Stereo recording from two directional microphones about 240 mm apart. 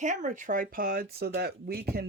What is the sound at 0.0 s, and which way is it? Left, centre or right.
Speech, right.